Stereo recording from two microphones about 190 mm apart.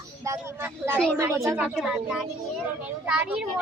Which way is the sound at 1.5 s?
5° right (ahead or behind).